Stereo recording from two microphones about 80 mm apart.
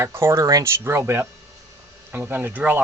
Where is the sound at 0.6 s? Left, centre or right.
Right.